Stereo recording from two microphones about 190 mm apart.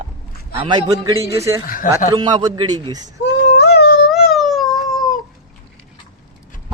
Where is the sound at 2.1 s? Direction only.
25° right (ahead or behind).